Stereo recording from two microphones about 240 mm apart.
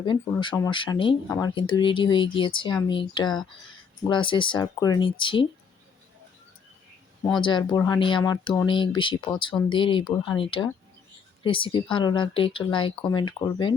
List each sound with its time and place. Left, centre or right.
0.0 s speech: centre
7.4 s speech: centre